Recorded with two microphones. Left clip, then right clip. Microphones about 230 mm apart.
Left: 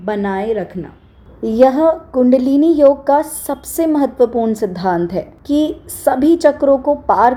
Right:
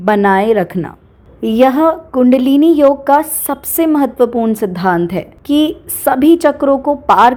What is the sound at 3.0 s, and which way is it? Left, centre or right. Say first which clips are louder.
A woman's voice: right 3 dB; right.